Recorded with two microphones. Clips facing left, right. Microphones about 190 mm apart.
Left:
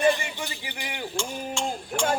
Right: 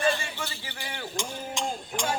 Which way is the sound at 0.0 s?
15° left (ahead or behind).